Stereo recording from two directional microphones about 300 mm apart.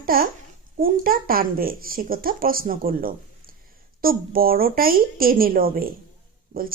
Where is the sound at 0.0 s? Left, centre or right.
Right.